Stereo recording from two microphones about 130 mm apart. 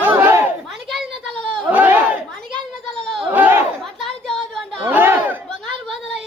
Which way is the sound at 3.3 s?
15° right (ahead or behind).